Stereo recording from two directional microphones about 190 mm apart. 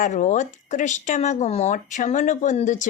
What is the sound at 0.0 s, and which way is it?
Speech, 40° left (ahead or behind).